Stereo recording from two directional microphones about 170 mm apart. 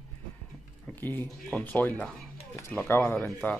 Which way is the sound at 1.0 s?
10° left (ahead or behind).